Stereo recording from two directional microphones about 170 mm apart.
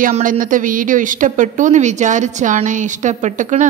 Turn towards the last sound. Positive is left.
turn(degrees=-45)  # may be behind; listen again after turning